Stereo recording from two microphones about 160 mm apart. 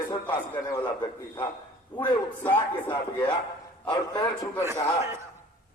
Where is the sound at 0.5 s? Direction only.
15° left (ahead or behind).